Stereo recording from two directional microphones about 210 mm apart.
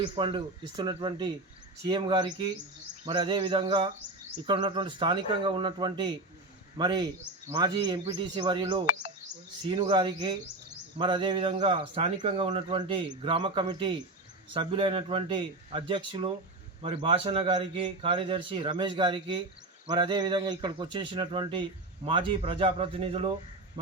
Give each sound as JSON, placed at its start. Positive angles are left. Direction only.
{"t": 0.0, "sound": "a man's voice", "side_deg": -25}